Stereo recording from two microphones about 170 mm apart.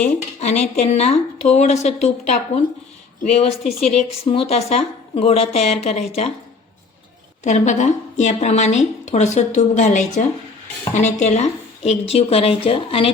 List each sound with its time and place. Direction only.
0.0 s a woman's voice: 40° left (ahead or behind)
3.6 s a woman's voice: centre (ahead or behind)
3.9 s a woman's voice: 35° left (ahead or behind)
7.4 s a woman's voice: 45° left (ahead or behind)